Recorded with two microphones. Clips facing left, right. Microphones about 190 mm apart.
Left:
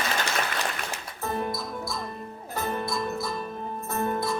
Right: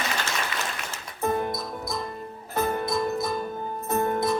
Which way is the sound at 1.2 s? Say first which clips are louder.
Right 4 dB; 20° right (ahead or behind).